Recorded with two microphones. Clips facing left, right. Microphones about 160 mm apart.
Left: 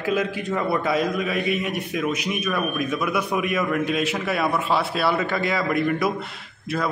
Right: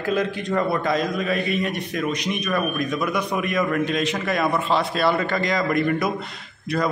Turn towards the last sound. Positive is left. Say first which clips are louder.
# right 2 dB
turn(degrees=5)  # may be behind; listen again after turning